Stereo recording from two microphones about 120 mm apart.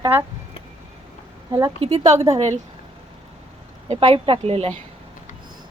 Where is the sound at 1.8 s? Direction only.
65° right (ahead or behind).